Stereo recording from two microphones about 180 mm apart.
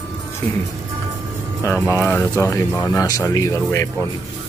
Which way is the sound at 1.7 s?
15° left (ahead or behind).